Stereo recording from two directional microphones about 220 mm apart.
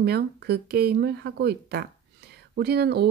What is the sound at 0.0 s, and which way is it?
Speech, 45° right (ahead or behind).